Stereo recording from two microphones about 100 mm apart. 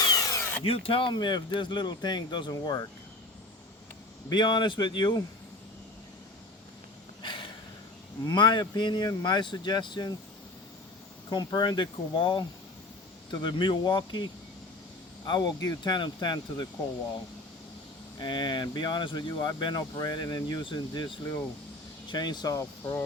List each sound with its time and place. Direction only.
0.0 s tools: 40° left (ahead or behind)
0.6 s speech: 70° left (ahead or behind); by 2.8 s 45° left (ahead or behind)
4.3 s speech: 50° left (ahead or behind)
7.2 s a sound: 55° left (ahead or behind)
8.2 s speech: 45° left (ahead or behind)
11.3 s speech: 45° left (ahead or behind)
15.3 s speech: 45° left (ahead or behind)
18.2 s speech: 50° left (ahead or behind)